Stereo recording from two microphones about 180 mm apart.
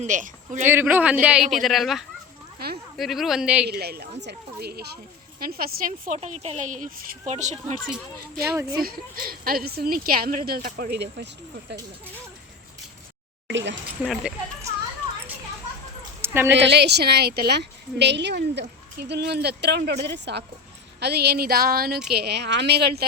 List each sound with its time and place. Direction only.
0.0 s a man's voice: 45° right (ahead or behind)
0.6 s a man's voice: 15° right (ahead or behind)
2.6 s a woman's voice: 60° right (ahead or behind)
3.0 s speech: centre (ahead or behind)
3.7 s a woman's voice: 65° right (ahead or behind)
6.1 s speech: 35° right (ahead or behind)
8.8 s a woman's voice: 55° right (ahead or behind)
13.5 s speech: 80° right
14.0 s speech: centre (ahead or behind)
16.2 s a woman's voice: 15° right (ahead or behind)
16.6 s a woman's voice: 75° right (ahead or behind)